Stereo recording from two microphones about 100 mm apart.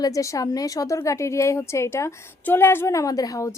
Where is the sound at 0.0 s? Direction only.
35° left (ahead or behind).